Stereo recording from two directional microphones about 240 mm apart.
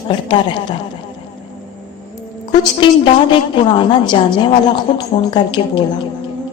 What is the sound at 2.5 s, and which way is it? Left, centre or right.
A woman's voice, left.